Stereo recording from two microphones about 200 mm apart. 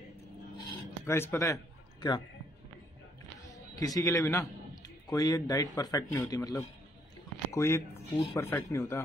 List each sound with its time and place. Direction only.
1.0 s a man's voice: 10° left (ahead or behind)
3.7 s a man's voice: 20° left (ahead or behind)
7.9 s speech: 30° left (ahead or behind)
8.4 s speech: 15° left (ahead or behind)